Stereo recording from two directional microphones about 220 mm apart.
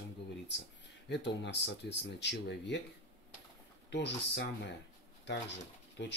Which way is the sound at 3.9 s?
50° left (ahead or behind).